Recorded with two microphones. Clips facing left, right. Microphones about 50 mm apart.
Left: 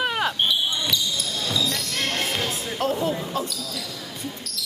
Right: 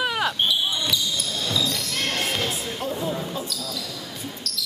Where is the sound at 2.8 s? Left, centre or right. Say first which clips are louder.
Left 4 dB; left.